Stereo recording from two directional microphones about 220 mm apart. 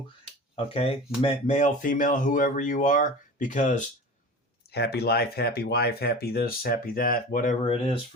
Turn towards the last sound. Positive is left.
turn(degrees=25)  # may be behind; listen again after turning